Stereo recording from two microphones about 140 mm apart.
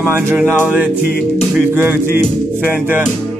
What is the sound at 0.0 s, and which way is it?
Speech, 15° right (ahead or behind).